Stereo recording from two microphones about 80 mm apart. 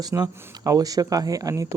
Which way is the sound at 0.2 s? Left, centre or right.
Right.